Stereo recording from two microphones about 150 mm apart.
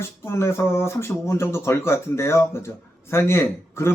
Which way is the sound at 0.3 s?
15° left (ahead or behind).